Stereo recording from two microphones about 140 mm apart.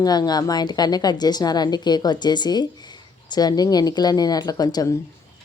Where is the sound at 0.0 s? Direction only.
30° left (ahead or behind).